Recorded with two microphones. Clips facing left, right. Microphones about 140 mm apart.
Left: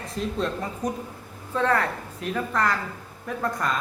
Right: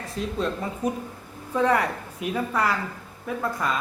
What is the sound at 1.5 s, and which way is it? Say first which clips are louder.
A woman's voice: right 1 dB; 10° right (ahead or behind).